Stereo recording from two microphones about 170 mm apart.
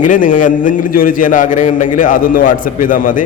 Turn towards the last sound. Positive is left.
turn(degrees=50)  # may be behind; listen again after turning